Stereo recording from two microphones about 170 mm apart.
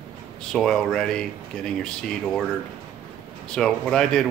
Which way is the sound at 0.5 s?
5° left (ahead or behind).